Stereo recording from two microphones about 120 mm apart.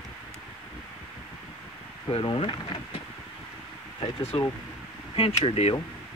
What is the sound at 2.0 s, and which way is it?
Speech, 45° left (ahead or behind).